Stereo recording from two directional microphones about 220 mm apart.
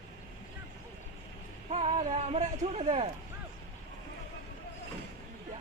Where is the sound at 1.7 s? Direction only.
30° right (ahead or behind).